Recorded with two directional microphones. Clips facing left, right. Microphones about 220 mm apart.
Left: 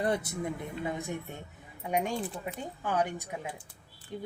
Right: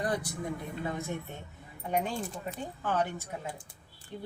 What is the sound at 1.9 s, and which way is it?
Speech, 15° left (ahead or behind).